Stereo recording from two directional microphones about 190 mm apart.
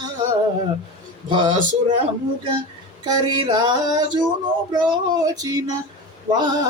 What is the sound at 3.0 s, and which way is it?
Music, 20° right (ahead or behind).